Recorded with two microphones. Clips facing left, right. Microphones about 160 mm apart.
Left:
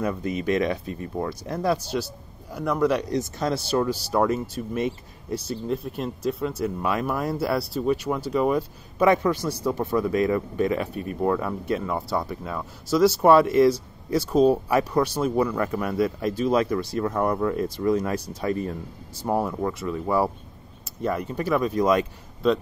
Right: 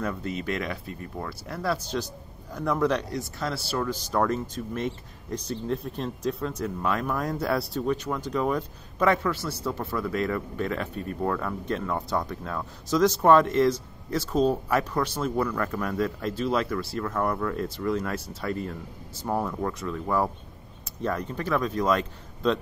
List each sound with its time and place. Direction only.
0.0 s speech: 15° left (ahead or behind)
2.5 s a man's voice: centre (ahead or behind)
3.0 s speech: 20° left (ahead or behind)